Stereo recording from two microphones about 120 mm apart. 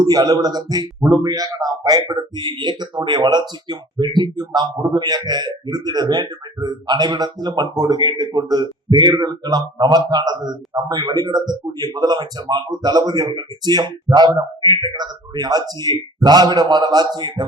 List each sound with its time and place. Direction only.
0.0 s speech: 35° right (ahead or behind)